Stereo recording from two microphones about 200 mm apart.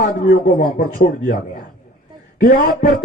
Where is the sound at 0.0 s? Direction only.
45° left (ahead or behind).